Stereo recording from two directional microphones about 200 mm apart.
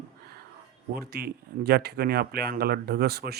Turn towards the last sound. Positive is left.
turn(degrees=-50)  # may be behind; listen again after turning